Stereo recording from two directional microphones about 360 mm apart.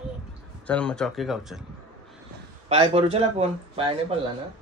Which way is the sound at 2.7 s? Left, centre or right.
Centre.